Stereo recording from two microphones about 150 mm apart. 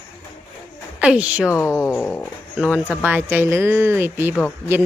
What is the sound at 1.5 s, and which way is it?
Speech, 20° left (ahead or behind).